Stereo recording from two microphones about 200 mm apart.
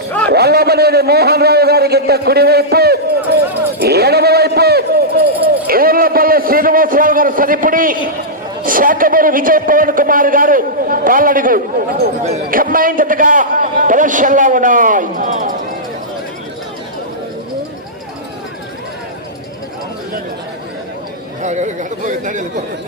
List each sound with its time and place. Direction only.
0.3 s a man's voice: 55° right (ahead or behind)
3.8 s a sound: 55° right (ahead or behind)
8.6 s a man's voice: 45° right (ahead or behind)
21.4 s speech: 35° right (ahead or behind)